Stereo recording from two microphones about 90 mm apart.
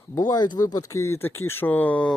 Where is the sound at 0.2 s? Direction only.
50° left (ahead or behind).